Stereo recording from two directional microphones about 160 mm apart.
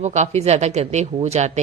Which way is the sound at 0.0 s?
45° right (ahead or behind).